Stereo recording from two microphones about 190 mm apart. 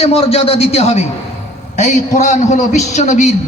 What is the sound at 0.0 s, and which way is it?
A man's voice, 30° left (ahead or behind).